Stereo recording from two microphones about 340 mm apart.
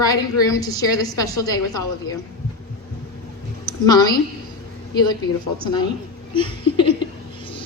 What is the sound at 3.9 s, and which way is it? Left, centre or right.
A woman's voice, centre.